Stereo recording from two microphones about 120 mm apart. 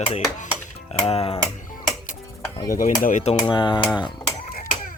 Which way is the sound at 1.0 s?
55° left (ahead or behind).